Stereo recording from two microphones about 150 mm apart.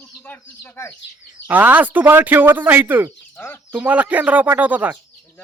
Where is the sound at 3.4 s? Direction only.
15° left (ahead or behind).